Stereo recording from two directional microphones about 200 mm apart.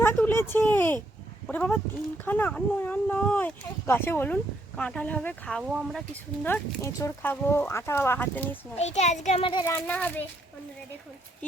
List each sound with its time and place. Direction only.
0.0 s speech: 10° left (ahead or behind)
6.4 s speech: 10° left (ahead or behind)
8.8 s a child's voice: 35° left (ahead or behind)
9.6 s speech: 10° left (ahead or behind)